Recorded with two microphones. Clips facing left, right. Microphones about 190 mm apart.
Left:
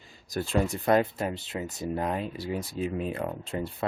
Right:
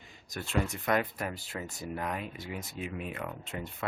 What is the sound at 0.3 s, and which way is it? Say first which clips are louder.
Speech: left 5 dB; 35° left (ahead or behind).